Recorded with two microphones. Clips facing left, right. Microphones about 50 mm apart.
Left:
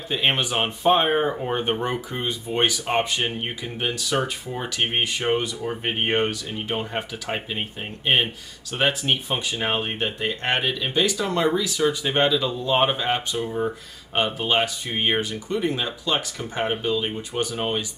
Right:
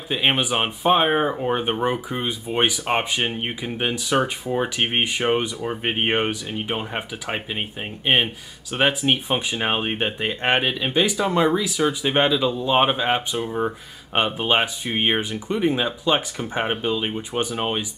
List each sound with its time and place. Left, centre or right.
0.1 s speech: centre